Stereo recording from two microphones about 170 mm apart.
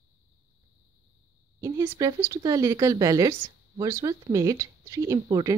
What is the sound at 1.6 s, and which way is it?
A woman's voice, 15° right (ahead or behind).